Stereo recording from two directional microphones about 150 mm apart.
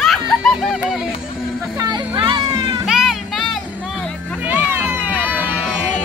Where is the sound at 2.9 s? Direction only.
Centre (ahead or behind).